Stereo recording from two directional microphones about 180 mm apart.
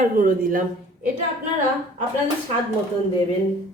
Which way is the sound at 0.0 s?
50° right (ahead or behind).